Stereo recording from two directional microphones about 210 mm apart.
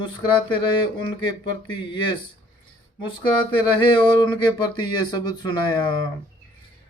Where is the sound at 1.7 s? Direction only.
25° left (ahead or behind).